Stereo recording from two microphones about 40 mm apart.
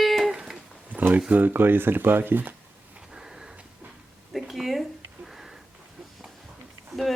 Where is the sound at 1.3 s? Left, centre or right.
Right.